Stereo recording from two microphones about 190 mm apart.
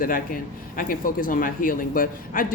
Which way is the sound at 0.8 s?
50° left (ahead or behind).